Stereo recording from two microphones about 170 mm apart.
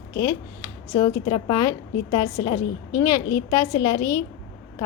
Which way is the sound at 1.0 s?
25° left (ahead or behind).